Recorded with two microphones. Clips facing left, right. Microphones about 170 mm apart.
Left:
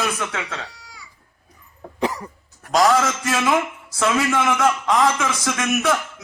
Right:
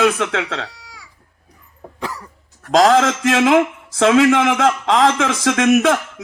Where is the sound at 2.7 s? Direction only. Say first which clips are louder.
Right 5 dB; 85° right.